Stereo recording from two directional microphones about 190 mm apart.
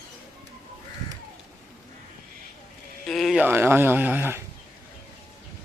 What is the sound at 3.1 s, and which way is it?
Sheep, centre (ahead or behind).